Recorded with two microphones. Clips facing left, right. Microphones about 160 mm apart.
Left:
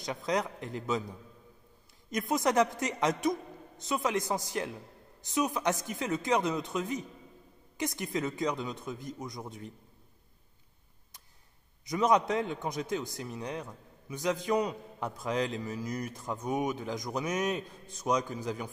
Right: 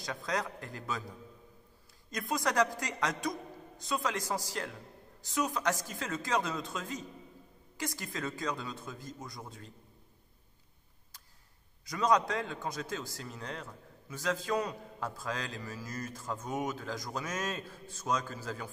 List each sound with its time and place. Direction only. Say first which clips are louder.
0.0 s a man's voice: left 4 dB; 20° left (ahead or behind)
2.0 s a man's voice: left 5 dB; 20° left (ahead or behind)
11.8 s a man's voice: left 2 dB; 20° left (ahead or behind)